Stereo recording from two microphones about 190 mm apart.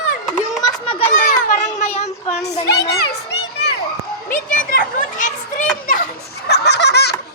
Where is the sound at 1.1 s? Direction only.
45° left (ahead or behind).